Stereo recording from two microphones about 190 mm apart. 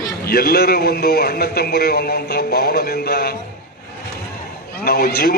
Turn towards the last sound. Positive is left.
turn(degrees=55)  # may be behind; listen again after turning